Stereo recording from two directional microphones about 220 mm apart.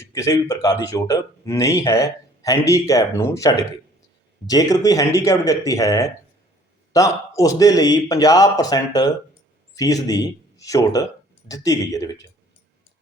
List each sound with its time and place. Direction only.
0.0 s speech: 15° left (ahead or behind)